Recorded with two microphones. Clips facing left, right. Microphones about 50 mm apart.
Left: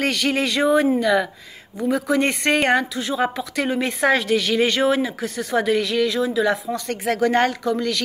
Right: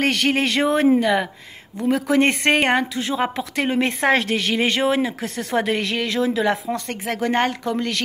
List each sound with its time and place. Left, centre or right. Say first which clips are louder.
0.0 s speech: right 2 dB; right
2.6 s speech: even; right